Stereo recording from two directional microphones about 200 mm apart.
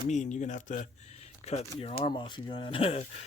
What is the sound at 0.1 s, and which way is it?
Speech, 35° left (ahead or behind).